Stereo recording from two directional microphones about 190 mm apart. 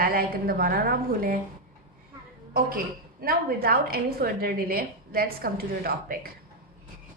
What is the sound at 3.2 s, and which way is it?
A woman's voice, 50° right (ahead or behind).